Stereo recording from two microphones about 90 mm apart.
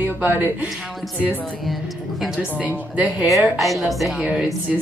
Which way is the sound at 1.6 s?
Centre (ahead or behind).